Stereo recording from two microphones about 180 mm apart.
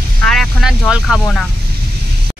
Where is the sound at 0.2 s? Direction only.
Centre (ahead or behind).